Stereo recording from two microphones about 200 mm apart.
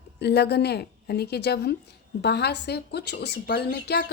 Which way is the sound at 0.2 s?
55° left (ahead or behind).